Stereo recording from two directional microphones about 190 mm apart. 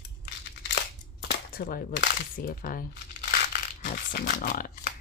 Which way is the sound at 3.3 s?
50° left (ahead or behind).